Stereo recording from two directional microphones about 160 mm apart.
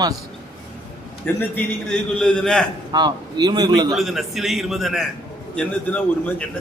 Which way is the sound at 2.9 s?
25° right (ahead or behind).